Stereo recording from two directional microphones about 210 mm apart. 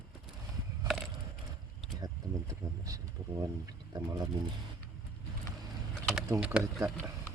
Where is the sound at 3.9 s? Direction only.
20° right (ahead or behind).